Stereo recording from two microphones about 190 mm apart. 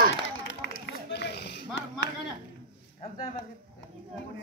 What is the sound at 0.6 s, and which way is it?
Run, 60° left (ahead or behind).